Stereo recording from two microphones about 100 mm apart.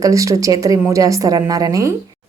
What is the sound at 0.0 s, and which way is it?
A woman's voice, 35° right (ahead or behind).